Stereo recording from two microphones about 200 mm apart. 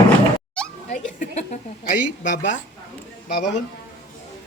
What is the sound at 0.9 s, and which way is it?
A woman's voice, 45° left (ahead or behind).